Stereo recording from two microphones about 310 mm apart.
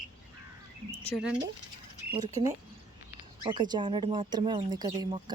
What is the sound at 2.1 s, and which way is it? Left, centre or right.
Speech, centre.